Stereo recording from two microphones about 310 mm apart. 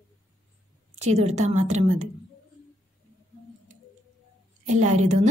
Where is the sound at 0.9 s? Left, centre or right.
Right.